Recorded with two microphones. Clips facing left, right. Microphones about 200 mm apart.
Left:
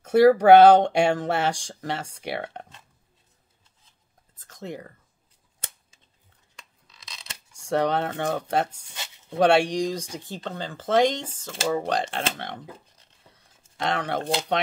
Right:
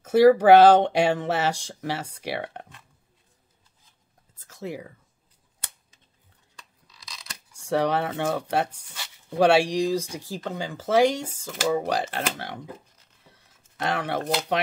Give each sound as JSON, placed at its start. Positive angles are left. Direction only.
{"t": 0.0, "sound": "speech", "side_deg": -5}
{"t": 4.4, "sound": "whispering", "side_deg": -10}
{"t": 7.0, "sound": "coin", "side_deg": 25}
{"t": 7.5, "sound": "speech", "side_deg": -5}
{"t": 8.9, "sound": "a sound", "side_deg": 20}
{"t": 9.4, "sound": "speech", "side_deg": -5}
{"t": 13.7, "sound": "speech", "side_deg": -5}